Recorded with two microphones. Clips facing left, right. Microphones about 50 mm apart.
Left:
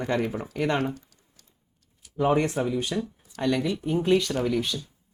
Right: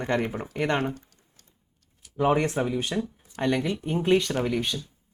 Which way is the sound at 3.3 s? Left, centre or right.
Right.